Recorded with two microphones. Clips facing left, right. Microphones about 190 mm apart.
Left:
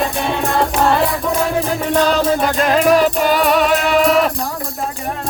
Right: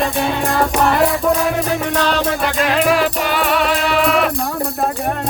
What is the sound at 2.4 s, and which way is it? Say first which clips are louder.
Music: left 2 dB; 45° left (ahead or behind).